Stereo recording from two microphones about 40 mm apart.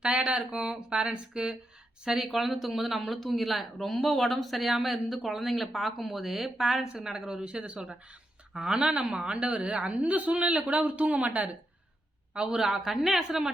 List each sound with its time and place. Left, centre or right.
0.3 s speech: right
2.0 s speech: centre; by 9.9 s right
9.9 s a man's voice: right
12.3 s speech: right
12.5 s speech: centre